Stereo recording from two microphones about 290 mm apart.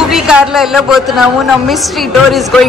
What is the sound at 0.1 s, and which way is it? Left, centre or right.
A woman's voice, centre.